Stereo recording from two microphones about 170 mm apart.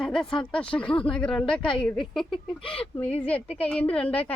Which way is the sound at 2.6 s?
35° left (ahead or behind).